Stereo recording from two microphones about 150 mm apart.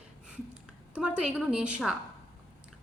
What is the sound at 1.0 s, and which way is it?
Speech, 5° right (ahead or behind).